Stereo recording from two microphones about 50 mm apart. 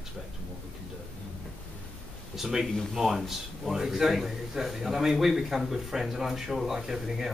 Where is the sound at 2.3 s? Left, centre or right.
Centre.